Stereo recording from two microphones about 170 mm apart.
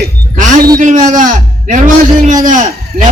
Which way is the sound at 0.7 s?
50° right (ahead or behind).